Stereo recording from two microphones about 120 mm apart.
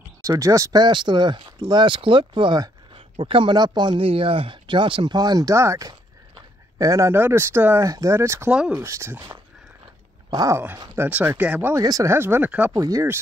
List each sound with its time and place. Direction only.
0.2 s speech: 25° right (ahead or behind)
4.0 s speech: 50° right (ahead or behind); by 8.5 s 20° right (ahead or behind)
8.5 s speech: 10° right (ahead or behind)
8.7 s speech: 25° right (ahead or behind)
10.3 s speech: 30° right (ahead or behind)
11.0 s speech: 15° right (ahead or behind)
11.8 s speech: 30° right (ahead or behind); by 12.7 s 15° right (ahead or behind)
12.7 s speech: 25° right (ahead or behind)